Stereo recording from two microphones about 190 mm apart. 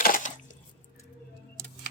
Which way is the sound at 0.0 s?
45° left (ahead or behind).